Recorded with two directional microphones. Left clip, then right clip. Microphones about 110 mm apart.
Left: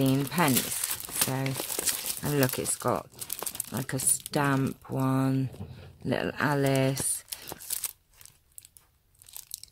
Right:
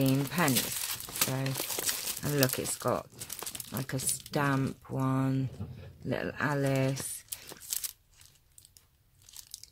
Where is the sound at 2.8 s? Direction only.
30° left (ahead or behind).